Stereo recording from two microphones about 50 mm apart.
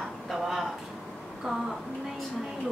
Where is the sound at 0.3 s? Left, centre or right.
Centre.